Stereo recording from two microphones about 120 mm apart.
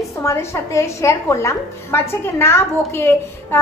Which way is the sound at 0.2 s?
25° left (ahead or behind).